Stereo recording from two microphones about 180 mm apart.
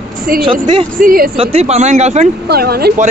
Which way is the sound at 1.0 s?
55° right (ahead or behind).